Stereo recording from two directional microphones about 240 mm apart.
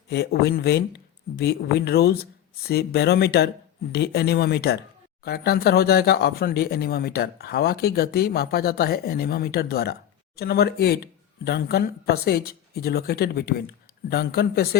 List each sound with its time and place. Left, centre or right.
0.1 s speech: left